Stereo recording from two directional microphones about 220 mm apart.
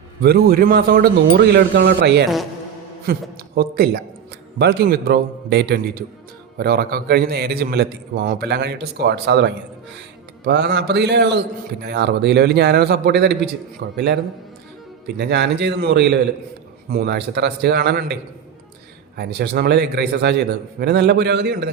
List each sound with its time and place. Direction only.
0.2 s a man's voice: 45° right (ahead or behind)
15.2 s a man's voice: 50° right (ahead or behind)